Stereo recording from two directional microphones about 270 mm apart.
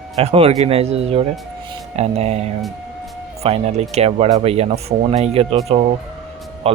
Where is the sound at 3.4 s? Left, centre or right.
Right.